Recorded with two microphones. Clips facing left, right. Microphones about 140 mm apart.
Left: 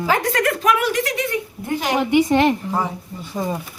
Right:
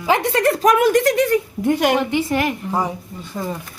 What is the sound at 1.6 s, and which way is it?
Speech, 70° right (ahead or behind).